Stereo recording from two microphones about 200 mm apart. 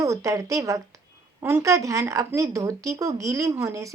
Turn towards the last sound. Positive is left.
turn(degrees=-15)  # may be behind; listen again after turning